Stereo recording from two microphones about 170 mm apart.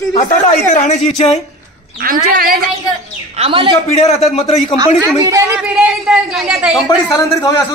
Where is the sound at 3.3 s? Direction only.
35° right (ahead or behind).